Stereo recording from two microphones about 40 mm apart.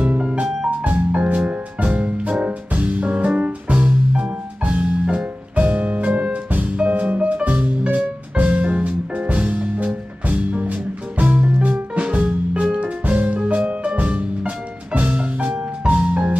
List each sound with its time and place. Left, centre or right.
0.0 s music: right